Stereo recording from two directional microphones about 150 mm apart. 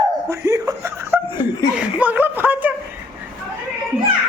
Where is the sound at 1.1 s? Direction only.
15° right (ahead or behind).